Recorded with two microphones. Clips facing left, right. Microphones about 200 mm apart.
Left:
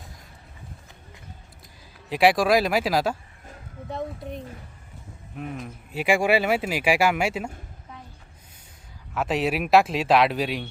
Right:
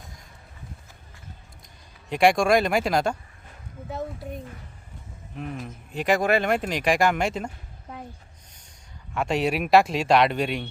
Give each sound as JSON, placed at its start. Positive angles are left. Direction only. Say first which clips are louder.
{"t": 2.0, "sound": "speech", "louder": "even", "side_deg": 5}
{"t": 7.9, "sound": "a sound", "louder": "right 6 dB", "side_deg": -55}
{"t": 9.1, "sound": "speech", "louder": "even", "side_deg": 0}